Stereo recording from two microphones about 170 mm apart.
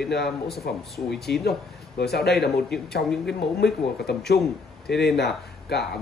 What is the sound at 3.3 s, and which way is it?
A man's voice, 70° left (ahead or behind).